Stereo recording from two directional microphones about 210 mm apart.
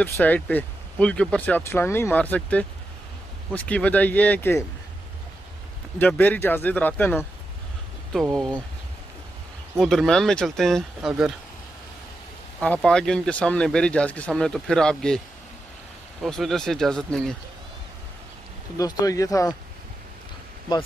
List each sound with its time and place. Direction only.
0.0 s speech: 5° left (ahead or behind)
5.9 s speech: 10° left (ahead or behind)
9.8 s speech: centre (ahead or behind)
12.5 s speech: 5° left (ahead or behind)
18.8 s speech: 15° left (ahead or behind)